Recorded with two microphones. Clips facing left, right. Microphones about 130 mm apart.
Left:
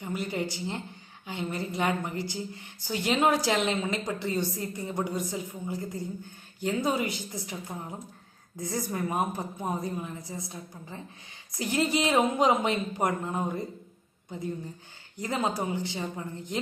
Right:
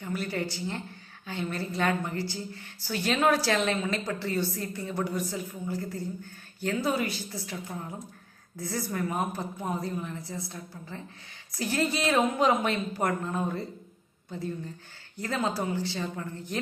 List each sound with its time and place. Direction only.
0.0 s a woman's voice: 15° left (ahead or behind)